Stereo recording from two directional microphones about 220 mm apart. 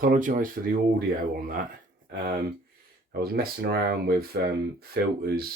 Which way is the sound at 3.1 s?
45° right (ahead or behind).